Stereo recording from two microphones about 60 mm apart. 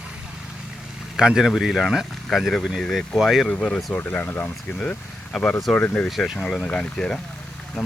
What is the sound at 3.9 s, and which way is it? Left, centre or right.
Speech, left.